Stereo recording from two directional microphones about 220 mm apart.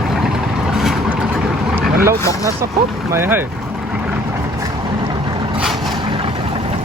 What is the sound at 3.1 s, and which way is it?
Vehicle, 10° right (ahead or behind).